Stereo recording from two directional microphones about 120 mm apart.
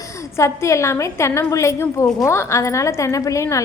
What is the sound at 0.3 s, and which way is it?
A woman's voice, 25° left (ahead or behind).